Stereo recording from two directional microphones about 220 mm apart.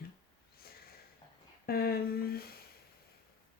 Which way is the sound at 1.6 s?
45° left (ahead or behind).